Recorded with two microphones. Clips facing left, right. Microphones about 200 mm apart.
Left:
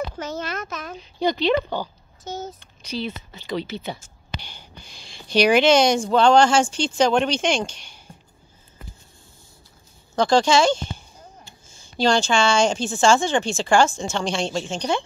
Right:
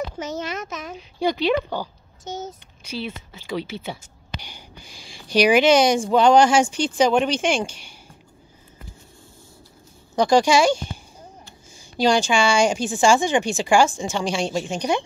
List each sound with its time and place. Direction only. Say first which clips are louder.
0.2 s speech: right 1 dB; 20° right (ahead or behind)
0.9 s speech: even; 10° right (ahead or behind)
2.2 s speech: even; 20° right (ahead or behind)
2.8 s speech: left 2 dB; 5° right (ahead or behind)
10.1 s speech: right 1 dB; 15° right (ahead or behind)